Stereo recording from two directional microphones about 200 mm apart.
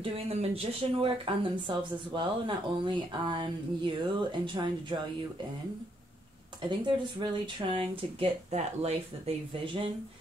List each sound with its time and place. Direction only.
0.0 s speech: 30° right (ahead or behind)
6.7 s speech: 20° right (ahead or behind)